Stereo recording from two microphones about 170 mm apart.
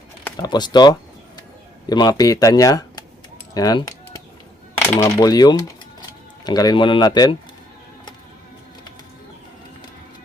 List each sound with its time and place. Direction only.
0.3 s speech: 25° left (ahead or behind)
3.5 s typing: 20° left (ahead or behind)
4.9 s speech: 15° left (ahead or behind)